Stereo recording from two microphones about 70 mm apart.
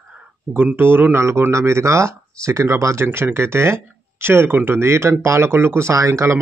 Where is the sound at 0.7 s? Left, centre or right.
Right.